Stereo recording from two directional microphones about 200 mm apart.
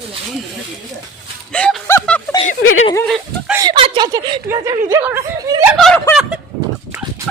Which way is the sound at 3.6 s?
25° right (ahead or behind).